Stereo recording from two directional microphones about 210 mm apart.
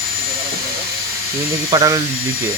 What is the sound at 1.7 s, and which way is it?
Speech, 15° right (ahead or behind).